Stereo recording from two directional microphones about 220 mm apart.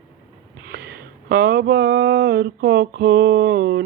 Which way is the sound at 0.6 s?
45° right (ahead or behind).